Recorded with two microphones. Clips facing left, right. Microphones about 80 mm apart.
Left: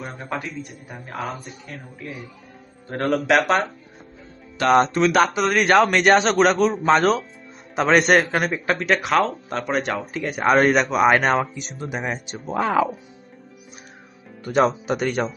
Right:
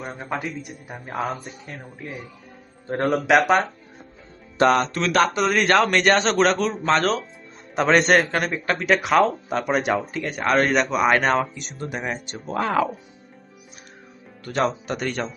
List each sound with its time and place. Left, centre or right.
0.3 s speech: centre
3.1 s a man's voice: centre
4.6 s speech: right
4.9 s speech: centre
5.2 s a man's voice: centre
14.8 s speech: centre